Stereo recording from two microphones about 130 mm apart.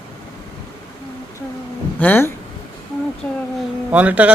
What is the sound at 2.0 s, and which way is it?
Speech, 15° left (ahead or behind).